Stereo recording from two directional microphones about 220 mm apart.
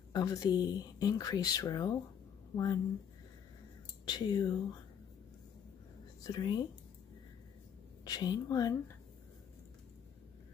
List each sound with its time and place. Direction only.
0.1 s a woman's voice: 15° left (ahead or behind)
4.0 s speech: 20° left (ahead or behind)
6.2 s speech: 20° left (ahead or behind)
8.0 s a woman's voice: 20° left (ahead or behind)